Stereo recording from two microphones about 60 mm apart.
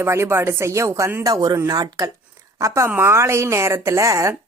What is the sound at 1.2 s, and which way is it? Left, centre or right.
Speech, right.